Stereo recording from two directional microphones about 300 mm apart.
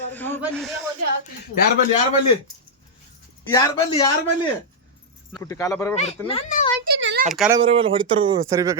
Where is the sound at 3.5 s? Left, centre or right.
Centre.